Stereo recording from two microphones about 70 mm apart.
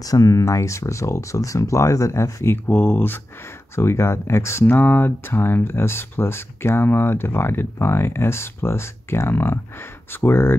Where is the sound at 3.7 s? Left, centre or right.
Left.